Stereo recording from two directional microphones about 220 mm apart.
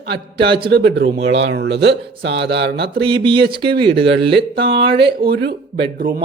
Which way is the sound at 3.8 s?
50° right (ahead or behind).